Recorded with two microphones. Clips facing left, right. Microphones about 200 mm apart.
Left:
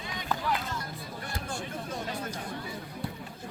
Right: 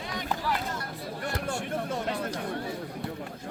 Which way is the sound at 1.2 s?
70° right (ahead or behind).